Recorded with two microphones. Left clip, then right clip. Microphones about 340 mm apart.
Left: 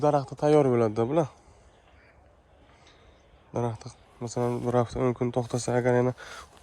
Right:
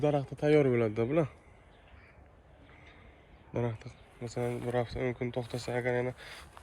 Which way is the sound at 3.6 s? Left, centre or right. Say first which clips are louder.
Left 4 dB; centre.